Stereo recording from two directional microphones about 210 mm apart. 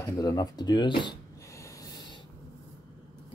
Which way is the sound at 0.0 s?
15° left (ahead or behind).